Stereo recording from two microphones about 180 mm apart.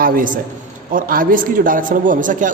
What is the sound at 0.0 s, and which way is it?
A man's voice, 50° right (ahead or behind).